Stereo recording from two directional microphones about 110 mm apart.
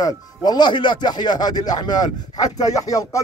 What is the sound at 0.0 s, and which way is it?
A man's voice, 40° left (ahead or behind).